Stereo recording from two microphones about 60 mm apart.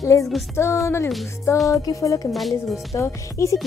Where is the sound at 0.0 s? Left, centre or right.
Left.